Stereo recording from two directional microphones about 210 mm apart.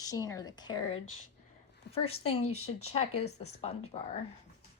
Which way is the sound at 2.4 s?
90° left.